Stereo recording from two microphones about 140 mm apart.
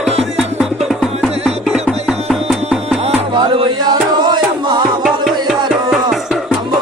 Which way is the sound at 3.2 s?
35° right (ahead or behind).